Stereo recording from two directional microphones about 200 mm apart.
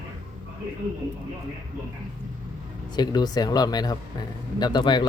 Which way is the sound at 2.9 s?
20° left (ahead or behind).